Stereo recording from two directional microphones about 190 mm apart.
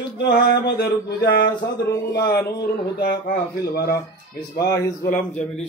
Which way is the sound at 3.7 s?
55° left (ahead or behind).